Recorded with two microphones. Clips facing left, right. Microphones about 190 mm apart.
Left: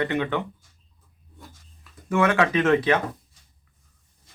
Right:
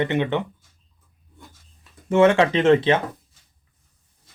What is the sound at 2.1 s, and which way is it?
Speech, 25° right (ahead or behind).